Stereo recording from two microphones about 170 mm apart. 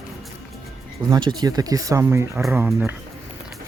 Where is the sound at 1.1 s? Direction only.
25° right (ahead or behind).